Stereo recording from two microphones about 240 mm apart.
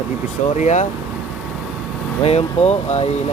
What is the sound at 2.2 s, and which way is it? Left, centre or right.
Speech, left.